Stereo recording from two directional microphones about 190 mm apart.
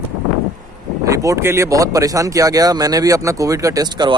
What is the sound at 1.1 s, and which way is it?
Speech, 15° right (ahead or behind).